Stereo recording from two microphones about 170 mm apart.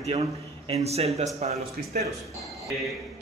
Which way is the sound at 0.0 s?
40° right (ahead or behind).